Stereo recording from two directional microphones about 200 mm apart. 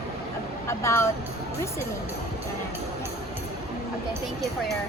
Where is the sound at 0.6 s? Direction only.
15° left (ahead or behind).